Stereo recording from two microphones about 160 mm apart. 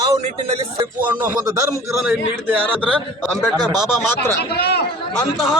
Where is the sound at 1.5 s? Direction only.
20° right (ahead or behind).